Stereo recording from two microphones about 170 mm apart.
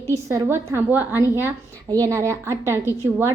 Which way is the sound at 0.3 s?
15° right (ahead or behind).